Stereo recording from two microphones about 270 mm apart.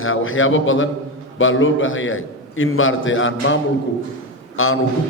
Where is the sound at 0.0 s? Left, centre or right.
Left.